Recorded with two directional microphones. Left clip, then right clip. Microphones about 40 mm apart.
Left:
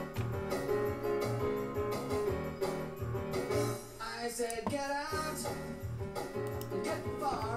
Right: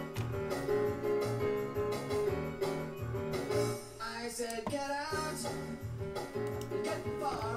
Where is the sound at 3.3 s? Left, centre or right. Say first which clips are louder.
Even; right.